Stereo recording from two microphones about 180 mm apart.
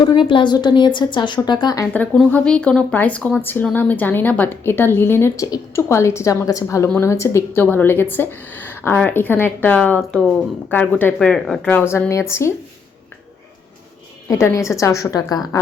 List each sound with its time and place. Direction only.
0.0 s a woman's voice: 25° left (ahead or behind)
1.9 s speech: 10° left (ahead or behind)
14.3 s speech: 15° left (ahead or behind)